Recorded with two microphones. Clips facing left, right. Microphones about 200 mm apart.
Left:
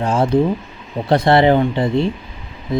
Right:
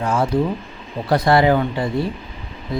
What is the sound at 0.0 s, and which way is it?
Speech, 30° left (ahead or behind).